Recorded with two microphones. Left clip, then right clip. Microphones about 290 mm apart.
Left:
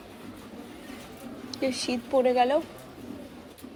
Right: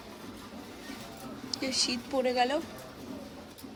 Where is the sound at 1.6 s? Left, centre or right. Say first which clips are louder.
Left 2 dB; centre.